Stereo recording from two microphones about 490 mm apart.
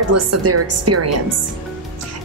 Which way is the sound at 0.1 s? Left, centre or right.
Right.